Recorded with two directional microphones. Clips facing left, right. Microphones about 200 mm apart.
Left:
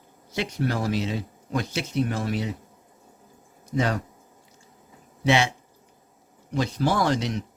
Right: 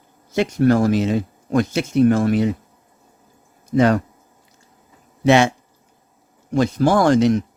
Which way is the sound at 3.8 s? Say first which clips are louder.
Right 10 dB; 60° right (ahead or behind).